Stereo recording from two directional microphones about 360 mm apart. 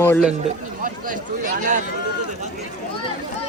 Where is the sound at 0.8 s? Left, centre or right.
Right.